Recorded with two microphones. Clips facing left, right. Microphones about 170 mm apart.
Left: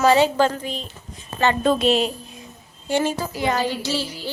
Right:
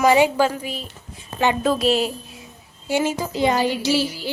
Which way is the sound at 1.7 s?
Centre (ahead or behind).